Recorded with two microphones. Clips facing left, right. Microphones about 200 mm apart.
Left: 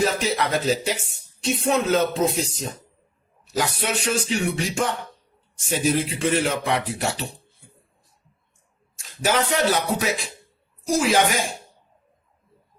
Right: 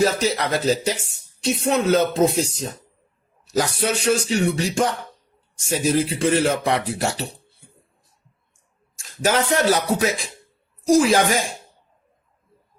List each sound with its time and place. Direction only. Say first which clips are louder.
0.0 s speech: right 2 dB; 40° right (ahead or behind)
9.0 s speech: right 2 dB; 45° right (ahead or behind)